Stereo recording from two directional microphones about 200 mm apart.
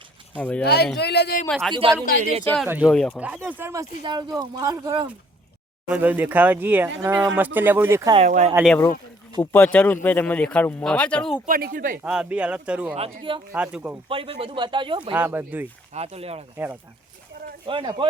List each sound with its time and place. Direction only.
0.3 s speech: 10° left (ahead or behind)
0.6 s speech: 55° left (ahead or behind)
1.5 s speech: centre (ahead or behind)
2.6 s speech: 5° right (ahead or behind)
4.0 s speech: 25° right (ahead or behind)
8.1 s speech: 35° right (ahead or behind)
8.6 s speech: 5° left (ahead or behind)
11.4 s speech: 45° right (ahead or behind)
12.0 s speech: 5° right (ahead or behind)
14.1 s speech: 25° right (ahead or behind)
15.1 s speech: 10° right (ahead or behind)
16.0 s speech: 30° right (ahead or behind)
17.7 s speech: 25° right (ahead or behind)